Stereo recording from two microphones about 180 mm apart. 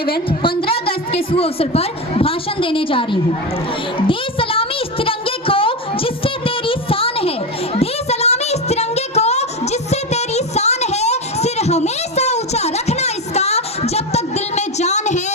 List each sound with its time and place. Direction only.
0.5 s a woman's voice: 60° left (ahead or behind)
1.1 s a woman's voice: 35° left (ahead or behind)
3.9 s a sound: 30° left (ahead or behind)